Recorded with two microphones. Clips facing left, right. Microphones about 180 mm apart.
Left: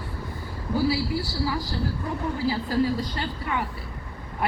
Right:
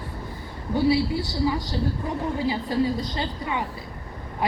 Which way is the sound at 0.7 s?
25° right (ahead or behind).